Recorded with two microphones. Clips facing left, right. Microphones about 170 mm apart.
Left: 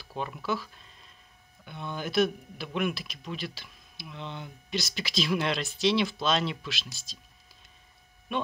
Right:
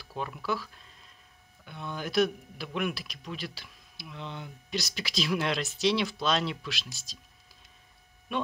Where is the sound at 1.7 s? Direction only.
Centre (ahead or behind).